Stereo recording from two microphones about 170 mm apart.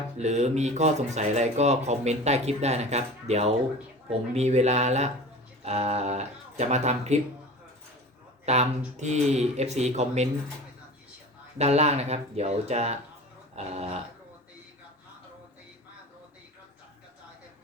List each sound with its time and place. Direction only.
0.2 s speech: 40° right (ahead or behind)
8.4 s speech: 40° right (ahead or behind)
11.5 s speech: 40° right (ahead or behind)